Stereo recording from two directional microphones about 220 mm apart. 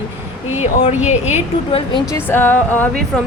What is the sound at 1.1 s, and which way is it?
Speech, 30° left (ahead or behind).